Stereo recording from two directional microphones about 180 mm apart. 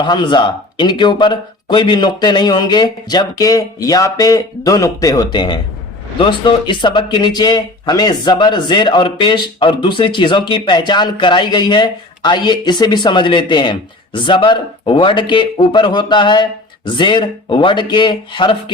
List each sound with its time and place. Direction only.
0.0 s speech: 25° left (ahead or behind)